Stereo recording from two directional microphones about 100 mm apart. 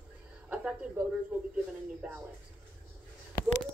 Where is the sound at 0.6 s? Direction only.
10° right (ahead or behind).